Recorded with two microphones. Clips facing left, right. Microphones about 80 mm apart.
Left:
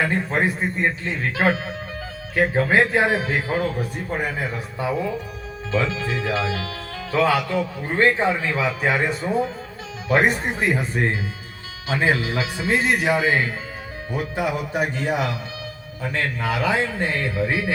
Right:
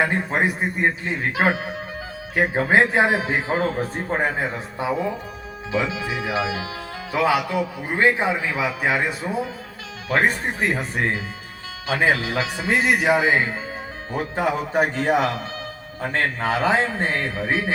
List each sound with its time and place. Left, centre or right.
0.0 s a man's voice: centre
10.6 s speech: centre
12.0 s speech: centre
14.1 s a man's voice: right